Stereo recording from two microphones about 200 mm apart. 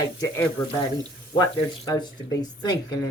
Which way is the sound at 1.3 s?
20° left (ahead or behind).